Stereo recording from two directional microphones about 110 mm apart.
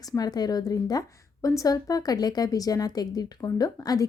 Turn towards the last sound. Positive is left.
turn(degrees=35)  # may be behind; listen again after turning